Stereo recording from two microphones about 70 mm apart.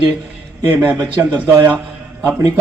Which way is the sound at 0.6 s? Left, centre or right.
Right.